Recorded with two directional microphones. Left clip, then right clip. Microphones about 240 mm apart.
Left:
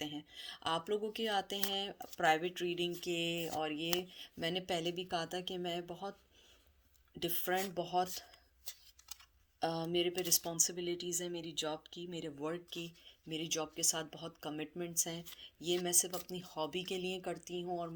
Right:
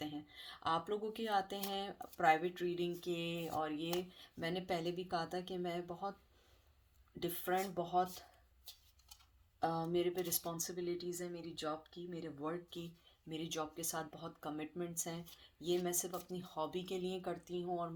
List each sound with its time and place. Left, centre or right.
0.0 s a sound: left
1.5 s speech: left
7.2 s speech: left
9.6 s speech: left